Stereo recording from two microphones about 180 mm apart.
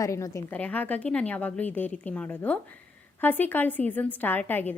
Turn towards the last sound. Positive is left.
turn(degrees=10)  # may be behind; listen again after turning